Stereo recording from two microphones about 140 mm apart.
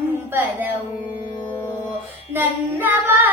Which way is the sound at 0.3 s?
15° right (ahead or behind).